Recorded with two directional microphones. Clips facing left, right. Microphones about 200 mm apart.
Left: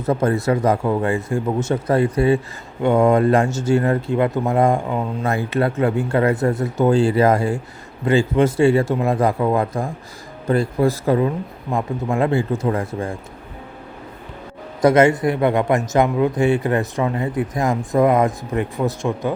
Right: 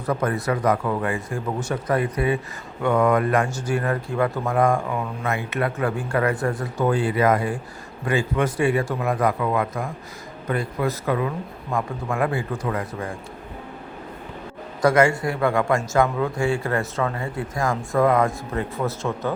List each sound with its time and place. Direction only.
0.0 s speech: 25° left (ahead or behind)
14.8 s speech: 20° left (ahead or behind)